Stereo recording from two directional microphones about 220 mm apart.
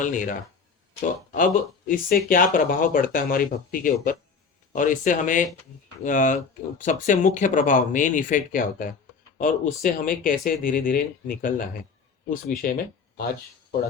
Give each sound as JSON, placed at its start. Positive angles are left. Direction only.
{"t": 0.0, "sound": "speech", "side_deg": 35}